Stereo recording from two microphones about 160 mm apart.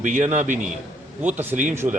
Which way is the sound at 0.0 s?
50° right (ahead or behind).